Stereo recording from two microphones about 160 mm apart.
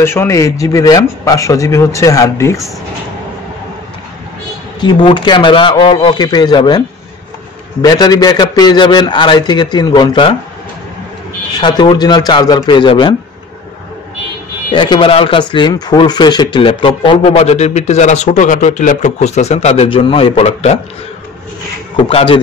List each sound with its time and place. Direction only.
0.0 s speech: 15° left (ahead or behind)
4.7 s speech: 30° left (ahead or behind)
7.8 s speech: 25° left (ahead or behind)
11.5 s speech: 30° left (ahead or behind)
14.7 s speech: 30° left (ahead or behind)
21.9 s speech: 35° left (ahead or behind)